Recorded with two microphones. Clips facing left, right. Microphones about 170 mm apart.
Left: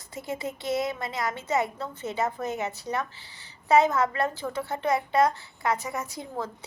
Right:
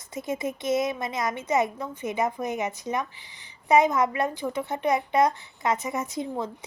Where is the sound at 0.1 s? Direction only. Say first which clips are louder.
Right 3 dB; 20° right (ahead or behind).